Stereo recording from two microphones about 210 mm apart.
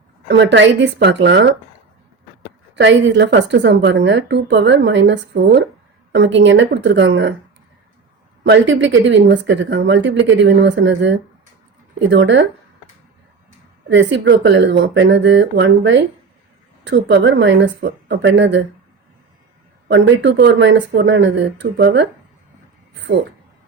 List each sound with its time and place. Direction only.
0.3 s a woman's voice: 55° right (ahead or behind)
2.7 s a woman's voice: 60° right (ahead or behind)
8.4 s a woman's voice: 60° right (ahead or behind)
13.9 s a woman's voice: 55° right (ahead or behind)
19.9 s a woman's voice: 60° right (ahead or behind)